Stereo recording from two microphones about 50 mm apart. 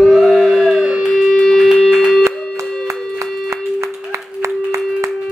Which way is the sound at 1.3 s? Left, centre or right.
Centre.